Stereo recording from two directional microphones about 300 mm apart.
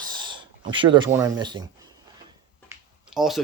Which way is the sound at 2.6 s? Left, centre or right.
Centre.